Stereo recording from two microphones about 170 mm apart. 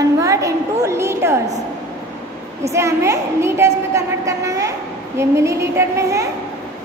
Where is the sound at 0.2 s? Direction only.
20° right (ahead or behind).